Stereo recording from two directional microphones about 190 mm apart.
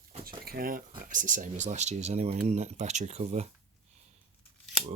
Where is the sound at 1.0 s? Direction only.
45° right (ahead or behind).